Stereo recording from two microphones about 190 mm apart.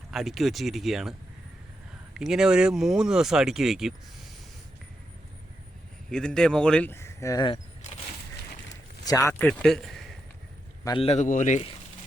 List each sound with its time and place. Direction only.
0.1 s speech: centre (ahead or behind)
2.1 s speech: 5° right (ahead or behind)
6.1 s speech: 5° left (ahead or behind); by 7.6 s 25° left (ahead or behind)
9.0 s a man's voice: 15° left (ahead or behind); by 10.2 s centre (ahead or behind)
10.8 s a man's voice: 30° left (ahead or behind)